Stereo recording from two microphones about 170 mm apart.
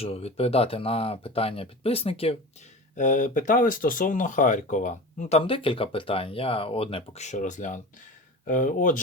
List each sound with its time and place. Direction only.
0.0 s speech: 35° left (ahead or behind)
2.9 s speech: 50° left (ahead or behind)
5.4 s speech: 30° left (ahead or behind); by 9.0 s 50° left (ahead or behind)